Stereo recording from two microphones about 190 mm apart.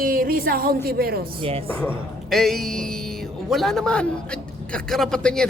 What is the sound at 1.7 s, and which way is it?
A man's voice, 10° left (ahead or behind).